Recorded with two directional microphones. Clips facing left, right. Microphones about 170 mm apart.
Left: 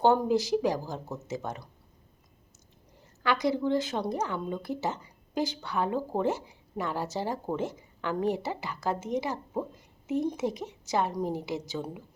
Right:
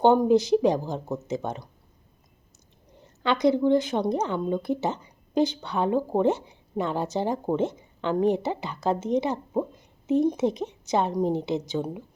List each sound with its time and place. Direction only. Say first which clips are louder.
0.0 s speech: right 5 dB; 20° right (ahead or behind)
3.0 s speech: right 5 dB; 20° right (ahead or behind)